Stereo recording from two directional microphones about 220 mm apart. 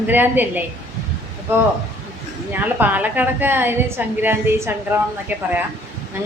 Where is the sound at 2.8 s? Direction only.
10° right (ahead or behind).